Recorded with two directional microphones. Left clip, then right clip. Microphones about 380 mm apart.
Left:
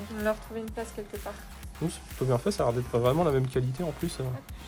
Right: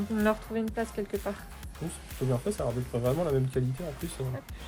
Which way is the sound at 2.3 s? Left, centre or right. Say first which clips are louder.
Left 5 dB; left.